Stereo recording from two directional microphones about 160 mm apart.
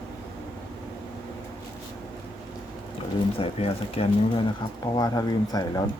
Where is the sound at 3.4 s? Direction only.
35° left (ahead or behind).